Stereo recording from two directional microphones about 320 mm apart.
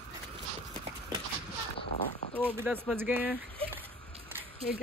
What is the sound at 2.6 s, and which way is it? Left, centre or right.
Speech, centre.